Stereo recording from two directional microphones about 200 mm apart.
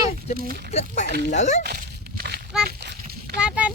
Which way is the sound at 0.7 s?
30° left (ahead or behind).